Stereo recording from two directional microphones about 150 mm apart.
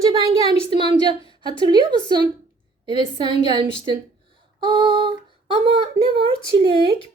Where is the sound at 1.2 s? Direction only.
35° left (ahead or behind).